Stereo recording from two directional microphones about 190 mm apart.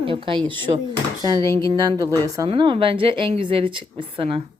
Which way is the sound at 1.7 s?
20° right (ahead or behind).